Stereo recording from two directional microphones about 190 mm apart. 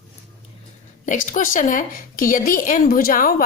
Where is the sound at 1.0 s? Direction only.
40° left (ahead or behind).